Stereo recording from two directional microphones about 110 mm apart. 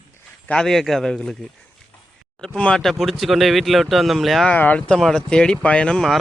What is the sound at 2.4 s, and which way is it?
Speech, 5° left (ahead or behind).